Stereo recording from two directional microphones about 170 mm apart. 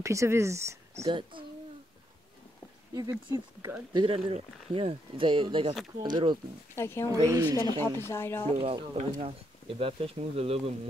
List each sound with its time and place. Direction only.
0.0 s speech: 15° right (ahead or behind)
1.0 s a woman's voice: 30° right (ahead or behind)
2.9 s a woman's voice: 20° right (ahead or behind)
6.7 s speech: 15° left (ahead or behind)
7.1 s a woman's voice: 20° right (ahead or behind)
7.8 s speech: 15° left (ahead or behind)
8.5 s speech: 35° right (ahead or behind)